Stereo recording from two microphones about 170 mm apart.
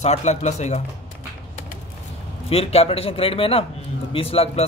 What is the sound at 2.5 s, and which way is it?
Speech, 35° left (ahead or behind).